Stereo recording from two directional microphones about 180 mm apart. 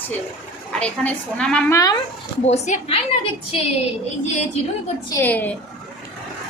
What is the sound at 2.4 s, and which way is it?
Speech, 35° left (ahead or behind).